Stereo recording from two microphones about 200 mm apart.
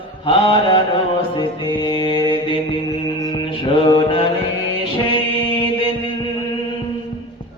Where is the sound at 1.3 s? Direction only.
25° left (ahead or behind).